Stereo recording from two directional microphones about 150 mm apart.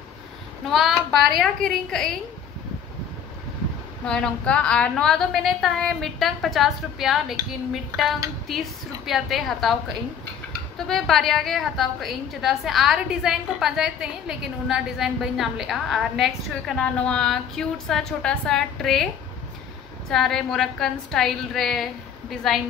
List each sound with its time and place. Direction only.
0.7 s a woman's voice: centre (ahead or behind)
4.0 s a woman's voice: 5° left (ahead or behind)
10.9 s a woman's voice: centre (ahead or behind)
20.1 s a woman's voice: centre (ahead or behind)